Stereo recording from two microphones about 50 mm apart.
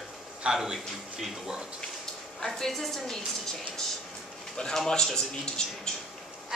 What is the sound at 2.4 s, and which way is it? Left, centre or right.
A woman's voice, centre.